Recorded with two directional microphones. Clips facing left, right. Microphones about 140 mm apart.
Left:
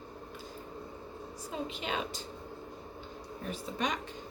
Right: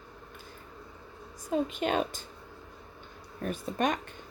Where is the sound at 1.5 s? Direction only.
50° right (ahead or behind).